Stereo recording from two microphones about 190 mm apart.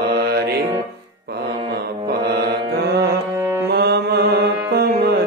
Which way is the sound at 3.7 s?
55° right (ahead or behind).